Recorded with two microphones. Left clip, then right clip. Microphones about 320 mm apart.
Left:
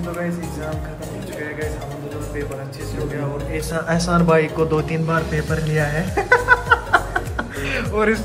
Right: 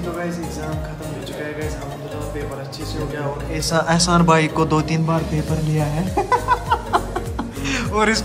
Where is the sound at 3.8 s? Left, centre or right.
Centre.